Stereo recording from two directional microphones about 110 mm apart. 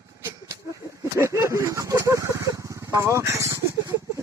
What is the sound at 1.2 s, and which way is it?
Speech, 25° right (ahead or behind).